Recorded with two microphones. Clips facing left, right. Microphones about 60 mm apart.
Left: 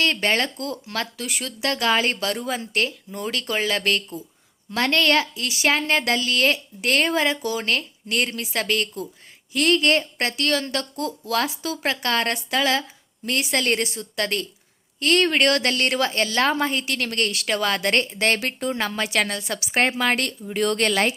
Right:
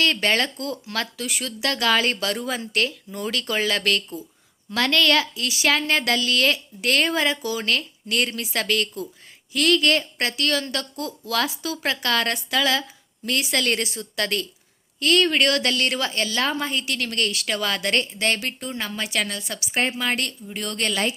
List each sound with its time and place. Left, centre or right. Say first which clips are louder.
0.0 s a woman's voice: even; left